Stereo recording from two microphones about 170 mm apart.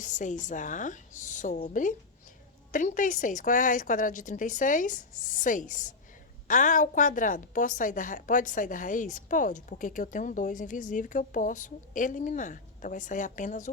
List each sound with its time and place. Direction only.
0.0 s a woman's voice: 45° left (ahead or behind)